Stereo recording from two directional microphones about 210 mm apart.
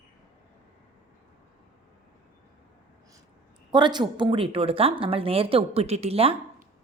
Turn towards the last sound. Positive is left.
turn(degrees=-30)  # may be behind; listen again after turning